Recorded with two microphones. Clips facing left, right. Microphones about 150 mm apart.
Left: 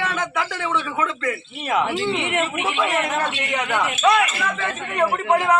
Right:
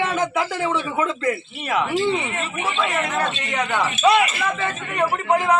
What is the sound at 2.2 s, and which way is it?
Speech, 75° left (ahead or behind).